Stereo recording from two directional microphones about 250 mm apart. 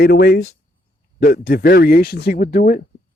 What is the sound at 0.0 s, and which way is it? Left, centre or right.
Speech, left.